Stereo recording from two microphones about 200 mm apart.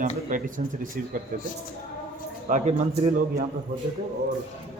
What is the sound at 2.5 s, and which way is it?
Speech, 40° right (ahead or behind).